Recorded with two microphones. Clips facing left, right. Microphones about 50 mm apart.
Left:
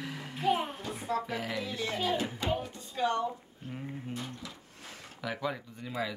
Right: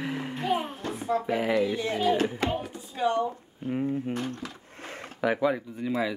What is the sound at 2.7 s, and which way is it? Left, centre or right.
Speech, centre.